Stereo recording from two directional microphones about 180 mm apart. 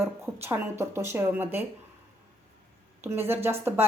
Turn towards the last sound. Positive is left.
turn(degrees=-15)  # may be behind; listen again after turning